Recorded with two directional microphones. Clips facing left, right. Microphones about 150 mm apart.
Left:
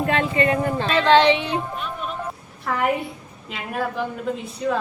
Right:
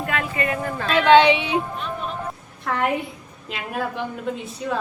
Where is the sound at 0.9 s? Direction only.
5° right (ahead or behind).